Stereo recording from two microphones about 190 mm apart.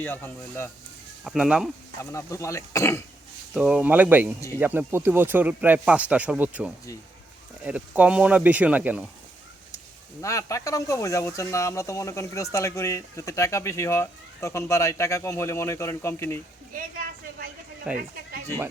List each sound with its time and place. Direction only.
0.0 s speech: 10° left (ahead or behind)
1.2 s speech: 5° right (ahead or behind)
2.1 s speech: 15° left (ahead or behind)
3.5 s speech: 5° right (ahead or behind)
10.2 s speech: 15° left (ahead or behind)
17.9 s speech: 5° right (ahead or behind)